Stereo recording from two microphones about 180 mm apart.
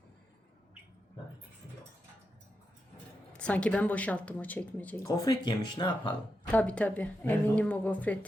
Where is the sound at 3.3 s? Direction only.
5° left (ahead or behind).